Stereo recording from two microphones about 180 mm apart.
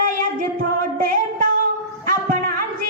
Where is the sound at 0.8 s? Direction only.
50° right (ahead or behind).